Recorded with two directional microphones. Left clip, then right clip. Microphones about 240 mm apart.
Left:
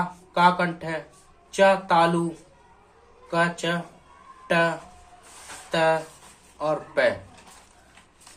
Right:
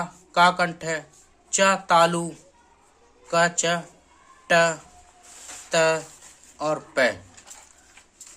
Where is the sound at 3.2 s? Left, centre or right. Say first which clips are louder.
Right 3 dB; right.